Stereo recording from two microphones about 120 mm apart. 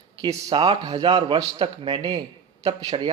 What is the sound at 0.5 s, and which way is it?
Speech, 40° right (ahead or behind).